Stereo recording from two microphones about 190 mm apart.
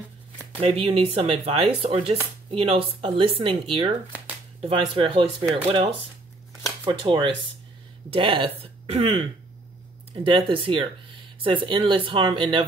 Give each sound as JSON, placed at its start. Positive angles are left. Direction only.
{"t": 0.6, "sound": "speech", "side_deg": -30}